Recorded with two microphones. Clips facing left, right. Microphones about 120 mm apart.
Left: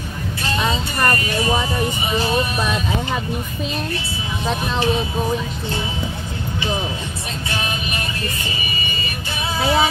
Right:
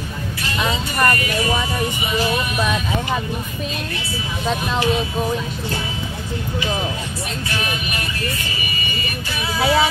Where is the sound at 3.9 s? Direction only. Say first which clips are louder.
Left 2 dB; 30° left (ahead or behind).